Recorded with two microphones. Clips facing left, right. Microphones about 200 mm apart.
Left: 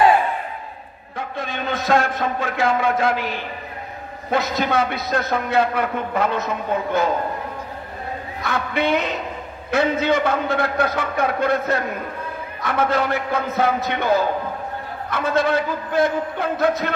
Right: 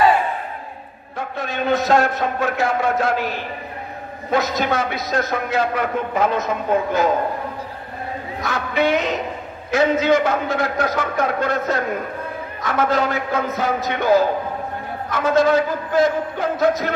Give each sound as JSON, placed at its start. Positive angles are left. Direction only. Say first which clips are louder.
{"t": 1.1, "sound": "a sound", "louder": "right 2 dB", "side_deg": 55}
{"t": 2.8, "sound": "a man's voice", "louder": "even", "side_deg": 55}
{"t": 4.3, "sound": "a man's voice", "louder": "right 1 dB", "side_deg": 60}
{"t": 8.4, "sound": "a man's voice", "louder": "right 2 dB", "side_deg": 60}